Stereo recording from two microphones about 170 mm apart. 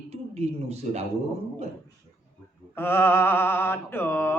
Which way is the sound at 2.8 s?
15° left (ahead or behind).